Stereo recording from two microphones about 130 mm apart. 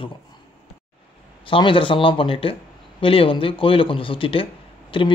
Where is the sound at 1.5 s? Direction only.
40° left (ahead or behind).